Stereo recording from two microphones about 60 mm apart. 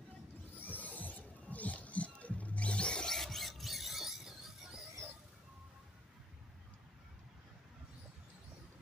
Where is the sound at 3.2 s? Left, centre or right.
Centre.